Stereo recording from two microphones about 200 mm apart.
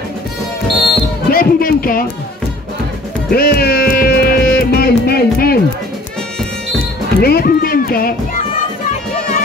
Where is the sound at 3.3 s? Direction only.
50° left (ahead or behind).